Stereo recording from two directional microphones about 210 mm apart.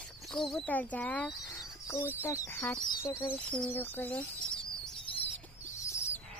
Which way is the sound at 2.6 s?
Centre (ahead or behind).